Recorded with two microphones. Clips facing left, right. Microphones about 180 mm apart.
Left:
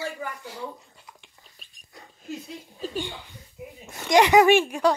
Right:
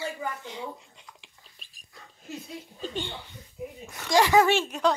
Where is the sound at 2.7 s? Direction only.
5° left (ahead or behind).